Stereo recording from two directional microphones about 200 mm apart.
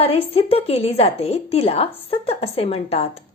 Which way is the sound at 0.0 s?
30° left (ahead or behind).